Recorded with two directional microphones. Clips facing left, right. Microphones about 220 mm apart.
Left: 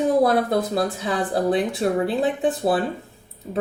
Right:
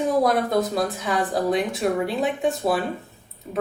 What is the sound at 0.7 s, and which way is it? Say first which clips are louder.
A woman's voice: left 1 dB; 30° left (ahead or behind).